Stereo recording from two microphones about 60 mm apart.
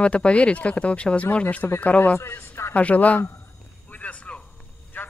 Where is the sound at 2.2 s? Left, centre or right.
Left.